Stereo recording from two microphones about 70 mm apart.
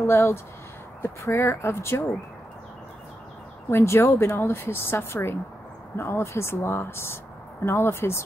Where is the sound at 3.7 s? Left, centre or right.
Left.